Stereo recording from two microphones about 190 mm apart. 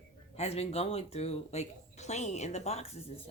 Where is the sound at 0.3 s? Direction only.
35° left (ahead or behind).